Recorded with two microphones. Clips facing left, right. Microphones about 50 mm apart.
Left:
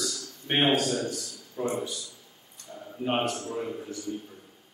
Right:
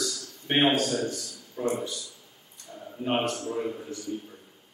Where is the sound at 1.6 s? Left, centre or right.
Centre.